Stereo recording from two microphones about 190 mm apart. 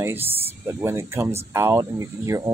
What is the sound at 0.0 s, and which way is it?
Speech, 10° right (ahead or behind).